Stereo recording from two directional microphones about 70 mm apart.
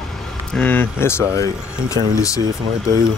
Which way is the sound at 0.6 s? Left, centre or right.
Left.